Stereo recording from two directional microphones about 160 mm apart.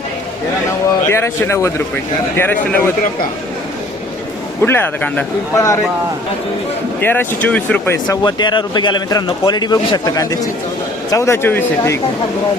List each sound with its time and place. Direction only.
1.0 s speech: 15° left (ahead or behind)
4.6 s speech: 15° left (ahead or behind)
5.5 s speech: 20° left (ahead or behind)
7.0 s speech: 15° left (ahead or behind)
8.0 s speech: 25° left (ahead or behind)